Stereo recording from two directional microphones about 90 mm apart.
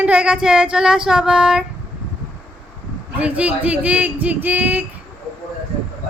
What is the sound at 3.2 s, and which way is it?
A woman's voice, 15° right (ahead or behind).